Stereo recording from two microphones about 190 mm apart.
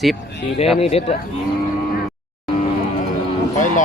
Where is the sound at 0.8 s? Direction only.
30° left (ahead or behind).